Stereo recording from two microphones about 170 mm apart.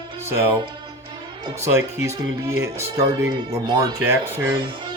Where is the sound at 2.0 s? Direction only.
15° right (ahead or behind).